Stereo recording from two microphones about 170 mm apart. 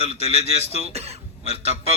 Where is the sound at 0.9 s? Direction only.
40° right (ahead or behind).